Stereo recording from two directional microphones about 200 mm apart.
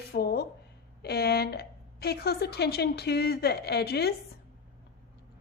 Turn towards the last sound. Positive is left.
turn(degrees=55)  # may be behind; listen again after turning